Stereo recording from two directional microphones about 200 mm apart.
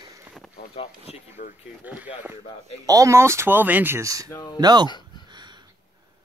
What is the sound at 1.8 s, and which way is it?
Speech, 10° right (ahead or behind).